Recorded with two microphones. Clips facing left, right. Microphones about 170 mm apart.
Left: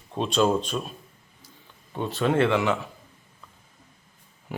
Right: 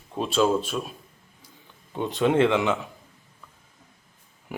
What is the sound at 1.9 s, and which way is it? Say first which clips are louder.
Speech: right 2 dB; 20° right (ahead or behind).